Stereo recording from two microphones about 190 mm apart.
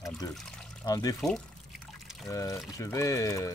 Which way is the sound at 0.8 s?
20° left (ahead or behind).